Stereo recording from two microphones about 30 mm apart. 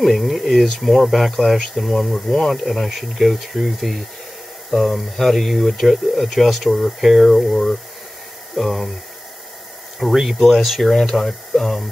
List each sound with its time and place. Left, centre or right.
0.0 s speech: centre
7.5 s speech: centre
8.5 s speech: centre
10.4 s speech: centre